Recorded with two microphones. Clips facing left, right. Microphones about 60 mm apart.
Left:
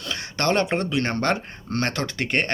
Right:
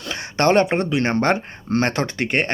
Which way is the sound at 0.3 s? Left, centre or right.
Right.